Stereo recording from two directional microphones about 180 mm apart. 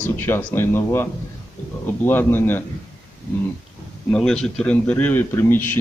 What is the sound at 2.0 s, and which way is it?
Speech, 10° left (ahead or behind).